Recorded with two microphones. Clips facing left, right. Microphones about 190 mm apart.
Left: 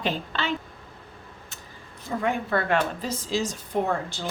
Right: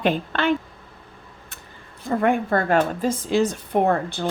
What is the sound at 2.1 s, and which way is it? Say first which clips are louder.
A woman's voice: right 6 dB; 55° right (ahead or behind).